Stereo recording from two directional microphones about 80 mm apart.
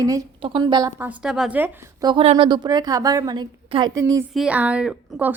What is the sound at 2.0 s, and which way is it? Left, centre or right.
A woman's voice, right.